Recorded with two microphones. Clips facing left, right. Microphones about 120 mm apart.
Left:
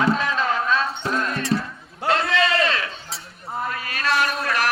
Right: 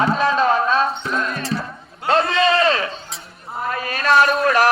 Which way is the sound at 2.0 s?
35° right (ahead or behind).